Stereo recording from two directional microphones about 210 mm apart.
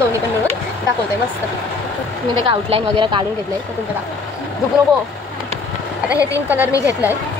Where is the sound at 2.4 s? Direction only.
25° right (ahead or behind).